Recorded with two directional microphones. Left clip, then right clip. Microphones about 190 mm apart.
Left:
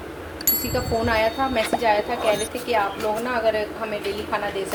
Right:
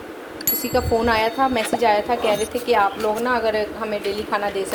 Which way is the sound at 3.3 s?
35° right (ahead or behind).